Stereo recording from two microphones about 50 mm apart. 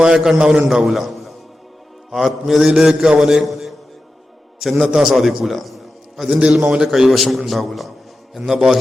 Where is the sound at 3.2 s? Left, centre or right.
Centre.